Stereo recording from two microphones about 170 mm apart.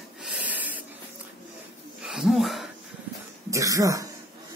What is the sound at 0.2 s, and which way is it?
Snort, 5° right (ahead or behind).